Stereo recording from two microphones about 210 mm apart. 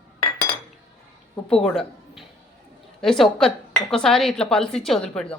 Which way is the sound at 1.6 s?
Centre (ahead or behind).